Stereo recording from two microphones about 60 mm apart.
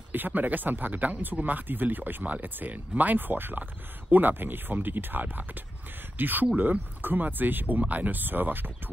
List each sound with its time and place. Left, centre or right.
0.1 s speech: right